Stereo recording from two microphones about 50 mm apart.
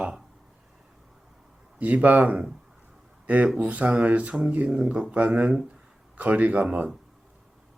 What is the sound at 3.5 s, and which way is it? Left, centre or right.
Speech, right.